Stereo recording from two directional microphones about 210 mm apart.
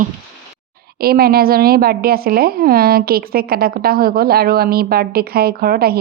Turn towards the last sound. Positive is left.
turn(degrees=-45)  # may be behind; listen again after turning